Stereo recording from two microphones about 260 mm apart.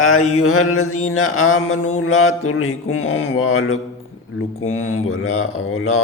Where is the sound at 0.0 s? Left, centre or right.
Left.